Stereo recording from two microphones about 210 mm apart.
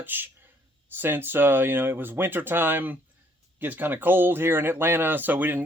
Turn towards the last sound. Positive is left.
turn(degrees=-10)  # may be behind; listen again after turning